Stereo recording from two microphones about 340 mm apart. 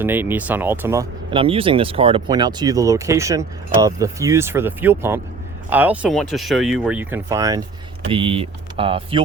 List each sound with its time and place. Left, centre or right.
0.0 s speech: centre